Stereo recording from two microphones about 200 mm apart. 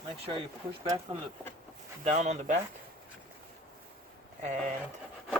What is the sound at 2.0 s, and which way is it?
Speech, 35° right (ahead or behind).